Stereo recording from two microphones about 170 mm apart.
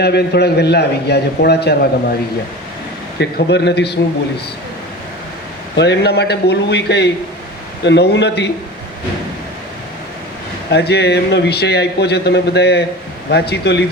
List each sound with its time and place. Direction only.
0.0 s a man's voice: 75° left (ahead or behind)
3.2 s a man's voice: 80° left
5.7 s a man's voice: 90° left
10.7 s a man's voice: 75° left (ahead or behind)